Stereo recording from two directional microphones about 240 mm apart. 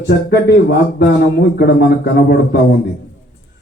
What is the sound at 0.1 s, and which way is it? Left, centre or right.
A man's voice, left.